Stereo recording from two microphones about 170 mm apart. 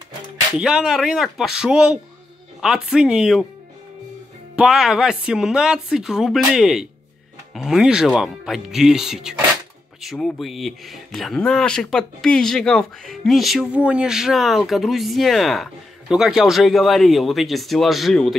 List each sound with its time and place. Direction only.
0.5 s speech: 5° right (ahead or behind)
4.6 s speech: 5° right (ahead or behind)